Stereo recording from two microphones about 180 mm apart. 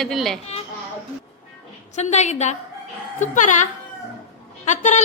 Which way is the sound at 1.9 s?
40° left (ahead or behind).